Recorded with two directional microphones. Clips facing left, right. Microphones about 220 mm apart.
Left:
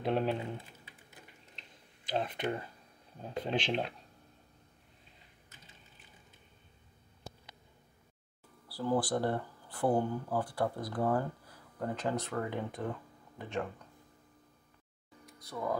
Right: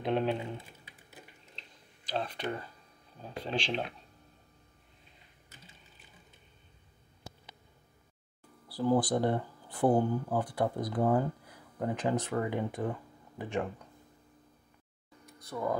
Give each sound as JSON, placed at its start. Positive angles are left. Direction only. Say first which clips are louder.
{"t": 0.0, "sound": "speech", "louder": "right 1 dB", "side_deg": 5}
{"t": 2.0, "sound": "speech", "louder": "left 1 dB", "side_deg": 20}
{"t": 8.6, "sound": "speech", "louder": "right 4 dB", "side_deg": -20}
{"t": 15.2, "sound": "speech", "louder": "right 2 dB", "side_deg": 0}